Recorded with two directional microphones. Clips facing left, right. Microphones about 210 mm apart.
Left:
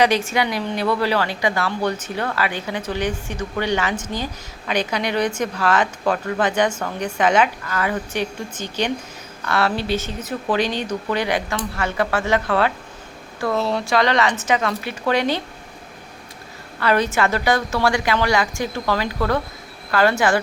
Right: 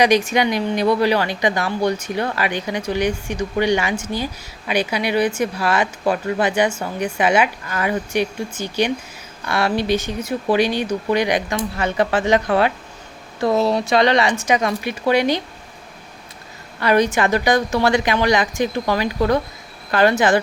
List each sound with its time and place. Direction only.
0.0 s a woman's voice: 15° right (ahead or behind)
16.8 s a woman's voice: 15° right (ahead or behind)